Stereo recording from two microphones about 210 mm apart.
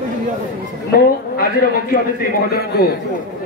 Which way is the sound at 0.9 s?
45° left (ahead or behind).